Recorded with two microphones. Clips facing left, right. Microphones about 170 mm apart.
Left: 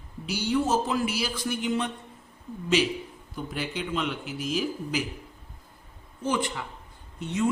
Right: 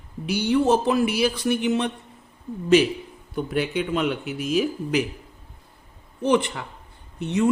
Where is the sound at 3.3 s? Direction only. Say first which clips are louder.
Right 8 dB; 60° right (ahead or behind).